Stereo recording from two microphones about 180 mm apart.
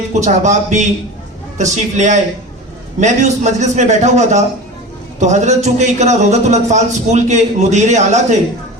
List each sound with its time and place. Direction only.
0.1 s a man's voice: 40° right (ahead or behind)